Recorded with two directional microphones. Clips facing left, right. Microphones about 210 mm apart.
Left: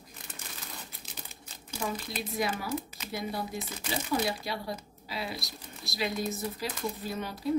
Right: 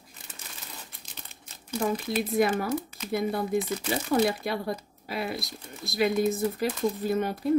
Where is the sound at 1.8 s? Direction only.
60° right (ahead or behind).